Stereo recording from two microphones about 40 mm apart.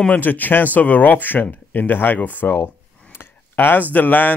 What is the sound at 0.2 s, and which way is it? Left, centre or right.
A man's voice, left.